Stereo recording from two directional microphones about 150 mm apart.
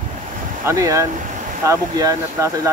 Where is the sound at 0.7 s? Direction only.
20° right (ahead or behind).